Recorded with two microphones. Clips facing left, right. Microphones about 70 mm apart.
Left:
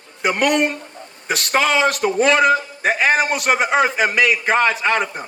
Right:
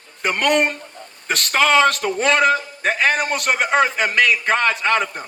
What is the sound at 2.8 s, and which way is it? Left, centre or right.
A man's voice, centre.